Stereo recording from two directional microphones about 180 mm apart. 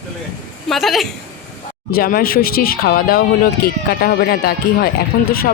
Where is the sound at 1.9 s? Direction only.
55° left (ahead or behind).